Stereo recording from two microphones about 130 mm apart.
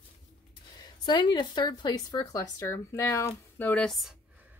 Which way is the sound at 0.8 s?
35° left (ahead or behind).